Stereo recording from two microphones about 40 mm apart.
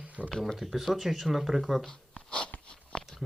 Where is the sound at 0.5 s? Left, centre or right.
Centre.